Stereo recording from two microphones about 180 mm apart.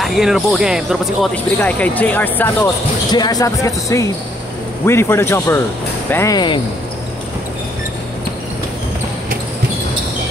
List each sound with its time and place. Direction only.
0.0 s speech: centre (ahead or behind)
3.1 s speech: 20° left (ahead or behind)